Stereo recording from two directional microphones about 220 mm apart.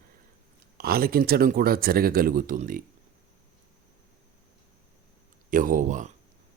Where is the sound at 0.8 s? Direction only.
45° right (ahead or behind).